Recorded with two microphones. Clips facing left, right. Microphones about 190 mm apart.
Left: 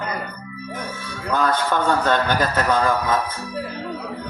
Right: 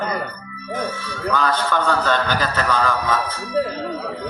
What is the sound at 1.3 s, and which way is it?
Speech, 50° left (ahead or behind).